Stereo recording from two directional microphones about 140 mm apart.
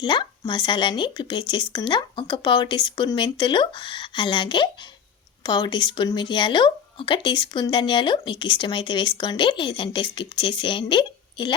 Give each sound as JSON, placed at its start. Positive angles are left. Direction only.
{"t": 0.0, "sound": "speech", "side_deg": 35}